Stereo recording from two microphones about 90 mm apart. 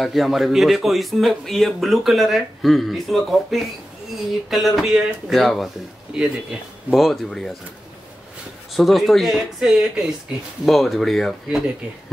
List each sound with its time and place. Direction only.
0.0 s a man's voice: centre (ahead or behind)
8.7 s a man's voice: centre (ahead or behind)